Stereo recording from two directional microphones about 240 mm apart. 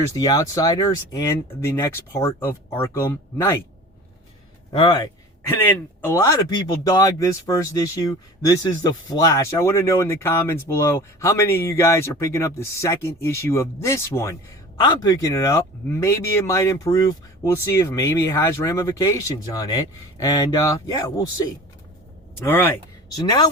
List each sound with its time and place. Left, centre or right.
0.1 s speech: centre
4.7 s speech: centre
22.4 s speech: centre